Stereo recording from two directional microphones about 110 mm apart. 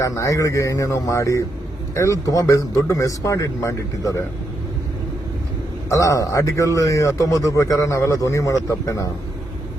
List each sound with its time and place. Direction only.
0.0 s speech: 30° left (ahead or behind)
5.9 s speech: 30° left (ahead or behind)